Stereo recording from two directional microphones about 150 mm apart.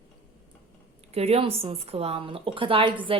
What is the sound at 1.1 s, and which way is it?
A woman's voice, 40° right (ahead or behind).